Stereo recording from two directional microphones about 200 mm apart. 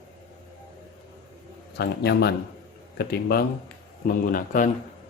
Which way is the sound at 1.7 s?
55° left (ahead or behind).